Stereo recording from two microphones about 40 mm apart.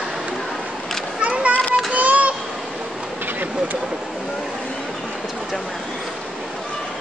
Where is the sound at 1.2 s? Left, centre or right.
Right.